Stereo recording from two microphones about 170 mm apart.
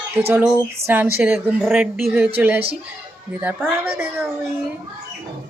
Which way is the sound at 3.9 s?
10° right (ahead or behind).